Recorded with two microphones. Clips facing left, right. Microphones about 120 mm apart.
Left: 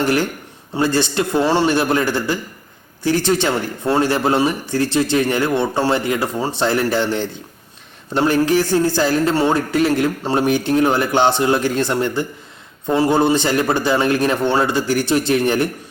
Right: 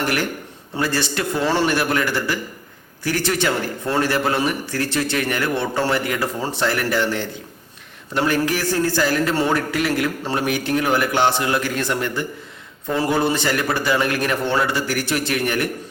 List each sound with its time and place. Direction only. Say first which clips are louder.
0.0 s a man's voice: left 4 dB; 25° left (ahead or behind)